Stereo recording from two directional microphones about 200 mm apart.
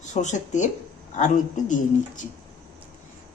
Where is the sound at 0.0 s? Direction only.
35° left (ahead or behind).